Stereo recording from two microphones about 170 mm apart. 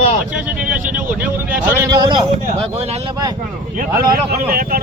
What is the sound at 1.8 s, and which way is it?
Speech, 20° right (ahead or behind).